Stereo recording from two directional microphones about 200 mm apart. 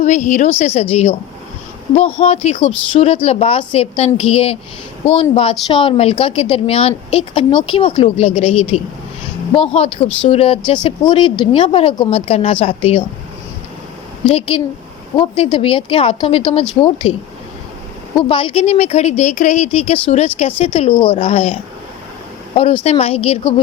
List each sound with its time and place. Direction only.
0.0 s a woman's voice: 35° left (ahead or behind)
14.3 s a woman's voice: 25° left (ahead or behind)
18.2 s a woman's voice: 25° left (ahead or behind)
22.8 s speech: 30° left (ahead or behind)